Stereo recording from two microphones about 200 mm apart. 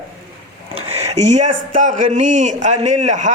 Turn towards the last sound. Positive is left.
turn(degrees=-35)  # may be behind; listen again after turning